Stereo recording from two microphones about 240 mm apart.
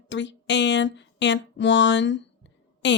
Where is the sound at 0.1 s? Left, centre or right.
Left.